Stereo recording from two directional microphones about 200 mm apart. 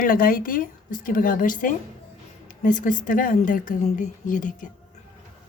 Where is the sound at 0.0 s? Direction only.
45° left (ahead or behind).